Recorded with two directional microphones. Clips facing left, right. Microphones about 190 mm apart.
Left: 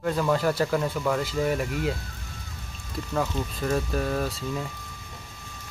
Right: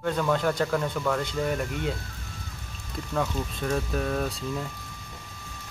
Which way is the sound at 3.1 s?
5° left (ahead or behind).